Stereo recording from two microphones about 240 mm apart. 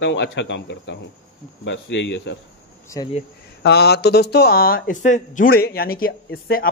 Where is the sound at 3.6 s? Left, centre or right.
Left.